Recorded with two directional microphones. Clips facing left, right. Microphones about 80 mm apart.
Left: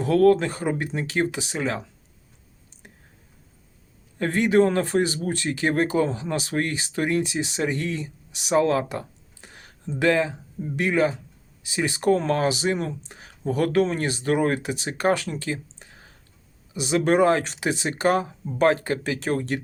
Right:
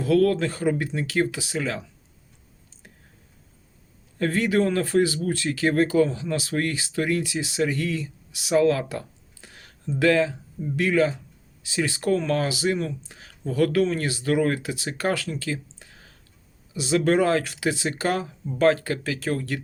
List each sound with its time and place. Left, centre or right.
0.0 s speech: left
4.2 s speech: left